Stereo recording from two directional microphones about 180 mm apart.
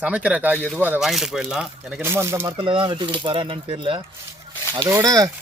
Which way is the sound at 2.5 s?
30° right (ahead or behind).